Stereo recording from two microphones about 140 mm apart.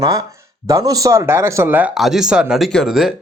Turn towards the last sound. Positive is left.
turn(degrees=-5)  # may be behind; listen again after turning